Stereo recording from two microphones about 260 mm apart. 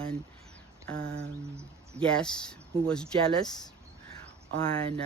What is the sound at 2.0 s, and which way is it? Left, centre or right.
Speech, centre.